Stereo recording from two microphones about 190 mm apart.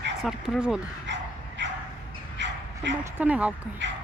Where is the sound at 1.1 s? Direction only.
65° right (ahead or behind).